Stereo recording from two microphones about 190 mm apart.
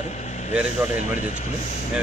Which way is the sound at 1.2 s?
40° left (ahead or behind).